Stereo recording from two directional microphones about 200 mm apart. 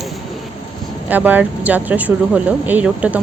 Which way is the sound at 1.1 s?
10° right (ahead or behind).